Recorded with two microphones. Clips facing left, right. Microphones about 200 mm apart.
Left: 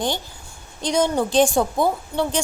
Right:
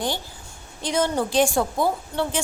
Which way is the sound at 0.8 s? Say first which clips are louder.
Left 3 dB; 15° left (ahead or behind).